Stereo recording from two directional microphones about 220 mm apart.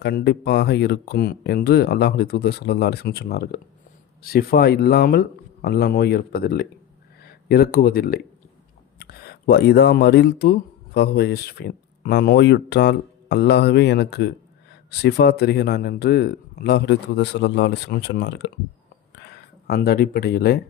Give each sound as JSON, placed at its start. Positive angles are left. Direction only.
{"t": 0.0, "sound": "a man's voice", "side_deg": 45}
{"t": 19.6, "sound": "a man's voice", "side_deg": 45}